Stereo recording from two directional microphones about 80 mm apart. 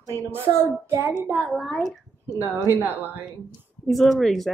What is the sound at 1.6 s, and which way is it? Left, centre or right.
Speech, centre.